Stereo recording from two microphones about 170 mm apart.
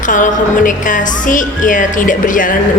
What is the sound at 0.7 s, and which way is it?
A woman's voice, 50° left (ahead or behind).